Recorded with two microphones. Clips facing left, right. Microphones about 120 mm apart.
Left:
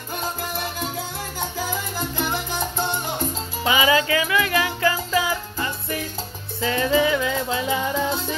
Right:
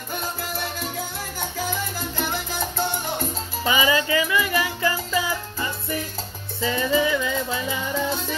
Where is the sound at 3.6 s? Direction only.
15° left (ahead or behind).